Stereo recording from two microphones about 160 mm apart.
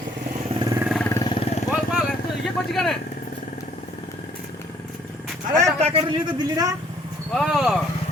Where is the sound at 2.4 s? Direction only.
Centre (ahead or behind).